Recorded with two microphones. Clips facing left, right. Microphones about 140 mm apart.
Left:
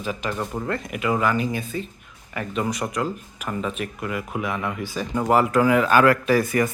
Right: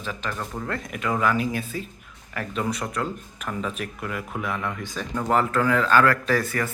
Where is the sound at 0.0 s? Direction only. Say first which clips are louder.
Left 4 dB; 15° left (ahead or behind).